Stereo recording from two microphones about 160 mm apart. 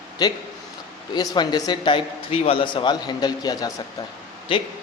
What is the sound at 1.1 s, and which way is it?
Speech, 25° left (ahead or behind).